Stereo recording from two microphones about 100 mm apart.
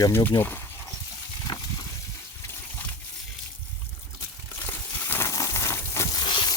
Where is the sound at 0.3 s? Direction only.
20° left (ahead or behind).